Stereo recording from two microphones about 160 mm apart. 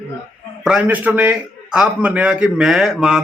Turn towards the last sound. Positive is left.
turn(degrees=-5)  # may be behind; listen again after turning